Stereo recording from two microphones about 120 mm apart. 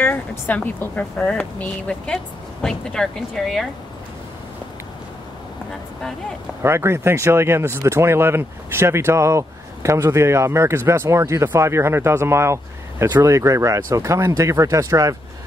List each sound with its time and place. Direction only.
0.0 s speech: 15° left (ahead or behind)
6.6 s speech: 20° right (ahead or behind)